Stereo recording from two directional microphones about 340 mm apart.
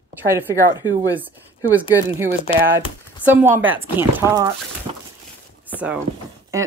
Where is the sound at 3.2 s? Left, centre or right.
Centre.